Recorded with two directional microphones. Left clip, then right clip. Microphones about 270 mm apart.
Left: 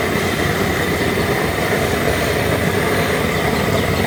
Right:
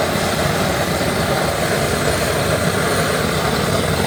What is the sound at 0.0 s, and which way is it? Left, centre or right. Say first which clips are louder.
Vehicle: even; right.